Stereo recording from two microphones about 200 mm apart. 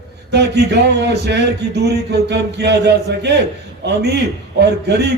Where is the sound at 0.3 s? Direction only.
55° right (ahead or behind).